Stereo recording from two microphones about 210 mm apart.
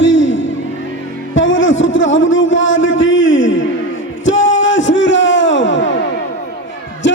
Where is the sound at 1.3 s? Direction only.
65° left (ahead or behind).